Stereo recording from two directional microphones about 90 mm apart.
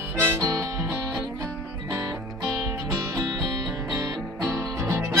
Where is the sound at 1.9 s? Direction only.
35° right (ahead or behind).